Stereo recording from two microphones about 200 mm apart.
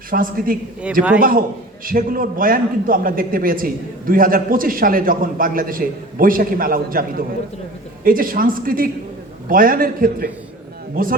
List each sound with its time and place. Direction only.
0.1 s a man's voice: 45° right (ahead or behind)